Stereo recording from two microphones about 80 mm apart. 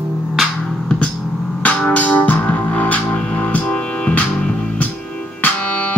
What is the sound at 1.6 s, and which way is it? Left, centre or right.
Music, centre.